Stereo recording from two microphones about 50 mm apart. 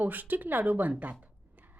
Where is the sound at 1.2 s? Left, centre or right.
Right.